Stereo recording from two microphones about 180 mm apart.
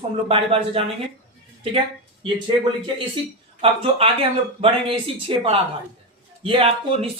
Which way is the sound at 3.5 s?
35° right (ahead or behind).